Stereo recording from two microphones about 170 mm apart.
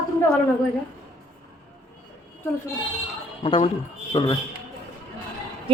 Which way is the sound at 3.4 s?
35° left (ahead or behind).